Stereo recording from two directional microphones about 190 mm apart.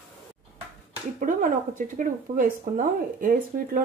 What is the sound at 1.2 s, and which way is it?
Speech, 45° right (ahead or behind).